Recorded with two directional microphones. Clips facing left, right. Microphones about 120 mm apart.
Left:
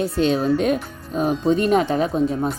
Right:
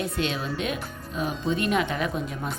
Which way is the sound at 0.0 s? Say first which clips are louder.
Left 9 dB; 35° left (ahead or behind).